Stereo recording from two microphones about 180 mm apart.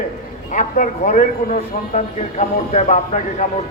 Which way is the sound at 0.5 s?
45° left (ahead or behind).